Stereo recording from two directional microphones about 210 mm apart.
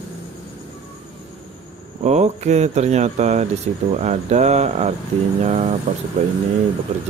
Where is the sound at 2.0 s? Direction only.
35° right (ahead or behind).